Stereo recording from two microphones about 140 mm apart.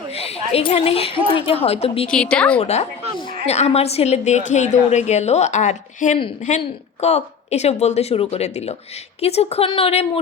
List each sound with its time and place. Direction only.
0.1 s a woman's voice: 45° left (ahead or behind)
2.0 s a woman's voice: 5° left (ahead or behind)
2.6 s a woman's voice: 50° left (ahead or behind)